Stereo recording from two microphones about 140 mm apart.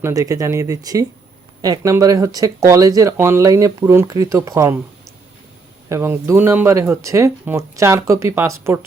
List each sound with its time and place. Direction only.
0.0 s speech: 25° right (ahead or behind)
5.9 s speech: 20° right (ahead or behind)